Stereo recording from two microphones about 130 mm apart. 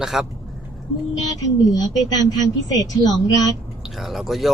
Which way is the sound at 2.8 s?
30° left (ahead or behind).